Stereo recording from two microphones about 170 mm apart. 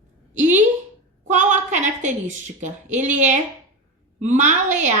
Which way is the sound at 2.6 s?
45° right (ahead or behind).